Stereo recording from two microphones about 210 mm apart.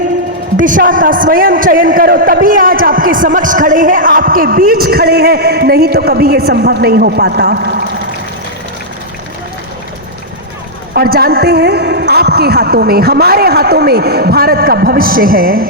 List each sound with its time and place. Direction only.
0.6 s a man's voice: 40° right (ahead or behind)
10.9 s a man's voice: 45° right (ahead or behind)